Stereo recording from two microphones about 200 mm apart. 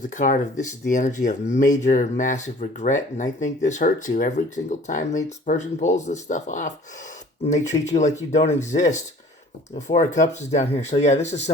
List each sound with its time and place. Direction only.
0.1 s speech: 40° left (ahead or behind)
7.7 s speech: 20° left (ahead or behind)
8.3 s speech: 35° left (ahead or behind)